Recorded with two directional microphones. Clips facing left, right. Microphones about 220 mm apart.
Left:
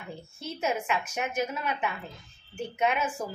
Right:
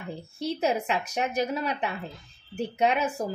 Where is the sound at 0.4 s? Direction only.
35° right (ahead or behind).